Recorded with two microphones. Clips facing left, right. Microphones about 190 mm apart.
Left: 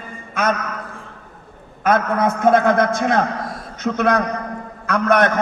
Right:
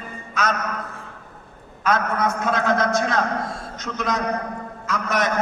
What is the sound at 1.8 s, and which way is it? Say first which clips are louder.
A man's voice: left 4 dB; 55° left (ahead or behind).